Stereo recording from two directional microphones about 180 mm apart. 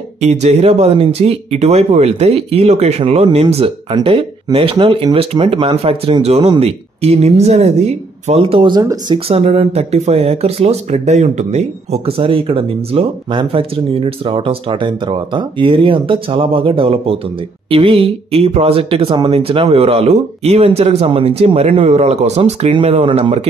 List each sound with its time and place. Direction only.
0.2 s speech: 35° right (ahead or behind)